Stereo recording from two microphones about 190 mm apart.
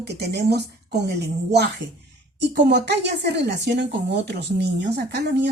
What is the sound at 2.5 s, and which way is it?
Speech, 65° right (ahead or behind).